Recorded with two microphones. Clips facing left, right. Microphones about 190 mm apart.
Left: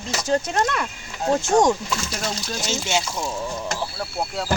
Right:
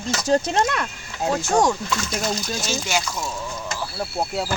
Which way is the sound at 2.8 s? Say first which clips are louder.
Left 1 dB; 25° left (ahead or behind).